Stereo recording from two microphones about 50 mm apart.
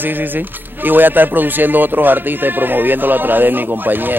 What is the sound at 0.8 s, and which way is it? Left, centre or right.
Speech, right.